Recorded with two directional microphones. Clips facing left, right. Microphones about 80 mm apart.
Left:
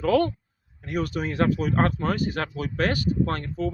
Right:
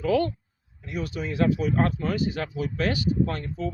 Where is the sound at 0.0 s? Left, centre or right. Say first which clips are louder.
Left 2 dB; left.